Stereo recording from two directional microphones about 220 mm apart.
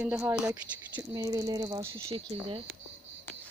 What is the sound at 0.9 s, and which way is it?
Speech, 15° right (ahead or behind).